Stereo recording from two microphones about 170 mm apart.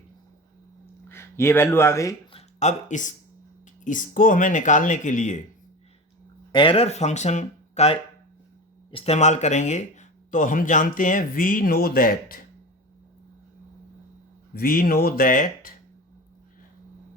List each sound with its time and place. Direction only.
1.0 s speech: 15° left (ahead or behind)
2.3 s speech: 45° left (ahead or behind)
6.5 s speech: 30° left (ahead or behind); by 12.5 s 55° left (ahead or behind)
14.5 s speech: 60° left (ahead or behind)